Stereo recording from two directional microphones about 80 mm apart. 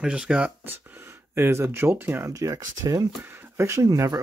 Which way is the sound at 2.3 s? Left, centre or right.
Right.